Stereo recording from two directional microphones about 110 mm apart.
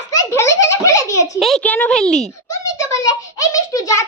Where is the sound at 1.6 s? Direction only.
15° left (ahead or behind).